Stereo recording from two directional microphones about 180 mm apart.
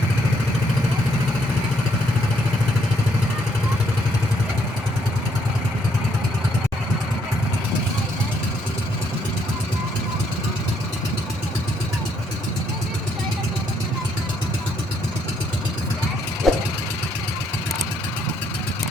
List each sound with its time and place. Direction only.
16.4 s vehicle: centre (ahead or behind)